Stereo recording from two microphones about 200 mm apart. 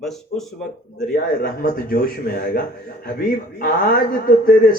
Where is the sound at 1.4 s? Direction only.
45° left (ahead or behind).